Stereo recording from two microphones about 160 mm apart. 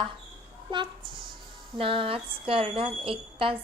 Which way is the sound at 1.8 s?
35° right (ahead or behind).